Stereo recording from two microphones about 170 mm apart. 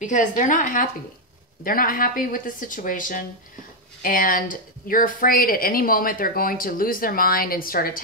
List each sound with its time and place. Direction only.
0.0 s a woman's voice: 45° left (ahead or behind)